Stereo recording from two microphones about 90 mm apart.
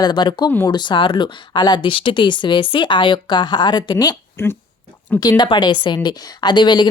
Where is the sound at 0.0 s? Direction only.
55° left (ahead or behind).